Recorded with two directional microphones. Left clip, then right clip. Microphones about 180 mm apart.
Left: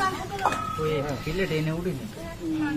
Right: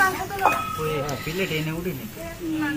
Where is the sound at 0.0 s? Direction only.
25° right (ahead or behind).